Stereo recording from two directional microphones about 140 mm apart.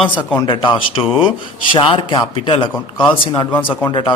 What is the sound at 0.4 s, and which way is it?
Speech, 35° left (ahead or behind).